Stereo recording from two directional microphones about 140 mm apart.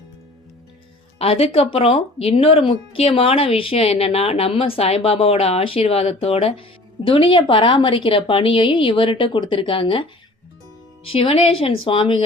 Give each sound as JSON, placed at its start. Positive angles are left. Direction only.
{"t": 1.2, "sound": "speech", "side_deg": 45}
{"t": 11.1, "sound": "speech", "side_deg": 40}